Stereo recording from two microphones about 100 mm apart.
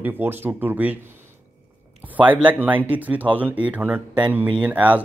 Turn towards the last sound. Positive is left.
turn(degrees=-15)  # may be behind; listen again after turning